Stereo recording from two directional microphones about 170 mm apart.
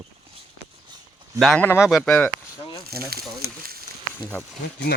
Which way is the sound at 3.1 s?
65° right (ahead or behind).